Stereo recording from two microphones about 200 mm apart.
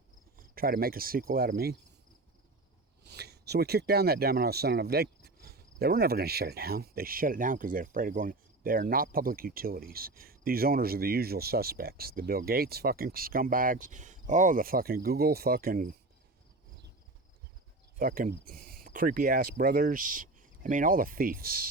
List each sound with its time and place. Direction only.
0.3 s speech: 45° right (ahead or behind)
3.0 s speech: 55° right (ahead or behind)
18.0 s speech: 45° right (ahead or behind)